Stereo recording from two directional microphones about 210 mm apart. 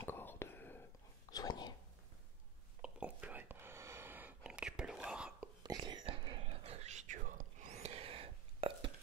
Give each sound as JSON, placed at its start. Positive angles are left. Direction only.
{"t": 0.0, "sound": "whispering", "side_deg": 10}
{"t": 2.8, "sound": "whispering", "side_deg": -5}
{"t": 5.6, "sound": "whispering", "side_deg": -20}